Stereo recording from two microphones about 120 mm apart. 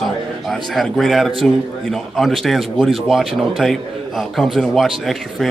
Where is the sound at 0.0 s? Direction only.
Centre (ahead or behind).